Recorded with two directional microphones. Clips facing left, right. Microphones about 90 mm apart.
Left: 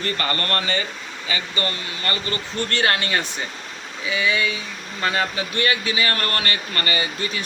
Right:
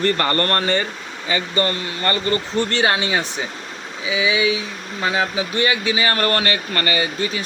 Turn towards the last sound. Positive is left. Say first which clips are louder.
# right 4 dB
turn(degrees=-25)  # may be behind; listen again after turning